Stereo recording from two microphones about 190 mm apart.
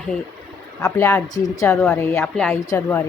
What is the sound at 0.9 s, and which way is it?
A woman's voice, 10° left (ahead or behind).